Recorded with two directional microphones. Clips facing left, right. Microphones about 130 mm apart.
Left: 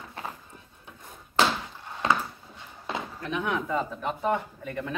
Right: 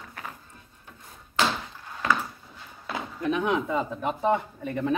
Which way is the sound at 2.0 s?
25° left (ahead or behind).